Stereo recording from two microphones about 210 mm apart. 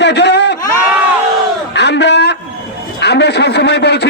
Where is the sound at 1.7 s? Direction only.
55° left (ahead or behind).